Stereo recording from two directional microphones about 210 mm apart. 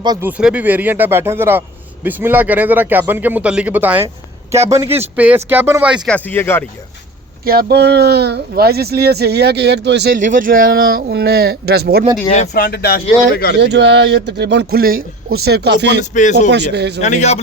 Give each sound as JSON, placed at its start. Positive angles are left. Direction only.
{"t": 0.0, "sound": "speech", "side_deg": -20}
{"t": 0.3, "sound": "speech", "side_deg": -5}
{"t": 6.1, "sound": "speech", "side_deg": 5}
{"t": 7.4, "sound": "speech", "side_deg": -45}
{"t": 10.2, "sound": "speech", "side_deg": -40}
{"t": 12.3, "sound": "speech", "side_deg": 40}
{"t": 13.6, "sound": "speech", "side_deg": -55}
{"t": 16.1, "sound": "a man's voice", "side_deg": 35}
{"t": 16.5, "sound": "speech", "side_deg": -55}
{"t": 17.0, "sound": "a man's voice", "side_deg": 35}